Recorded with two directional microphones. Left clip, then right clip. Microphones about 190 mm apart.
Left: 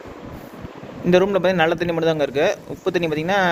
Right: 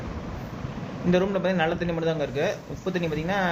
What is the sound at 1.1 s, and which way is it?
Speech, 55° left (ahead or behind).